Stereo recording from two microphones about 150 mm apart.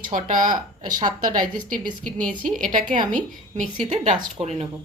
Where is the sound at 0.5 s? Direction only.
25° right (ahead or behind).